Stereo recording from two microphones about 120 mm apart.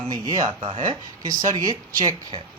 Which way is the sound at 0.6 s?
45° right (ahead or behind).